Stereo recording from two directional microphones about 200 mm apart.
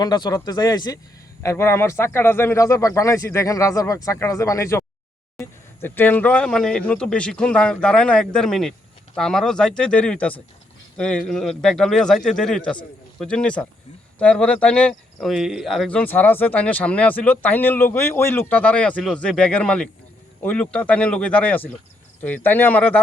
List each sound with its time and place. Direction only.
0.0 s speech: 20° left (ahead or behind)